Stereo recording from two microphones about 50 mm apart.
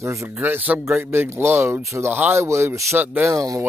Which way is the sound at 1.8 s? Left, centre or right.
Right.